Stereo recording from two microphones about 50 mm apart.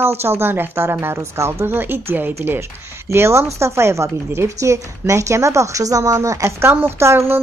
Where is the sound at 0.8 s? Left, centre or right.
Right.